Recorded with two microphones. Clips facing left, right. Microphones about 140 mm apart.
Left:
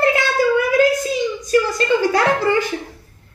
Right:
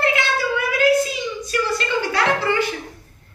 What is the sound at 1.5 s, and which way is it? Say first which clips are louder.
A woman's voice: left 6 dB; 45° left (ahead or behind).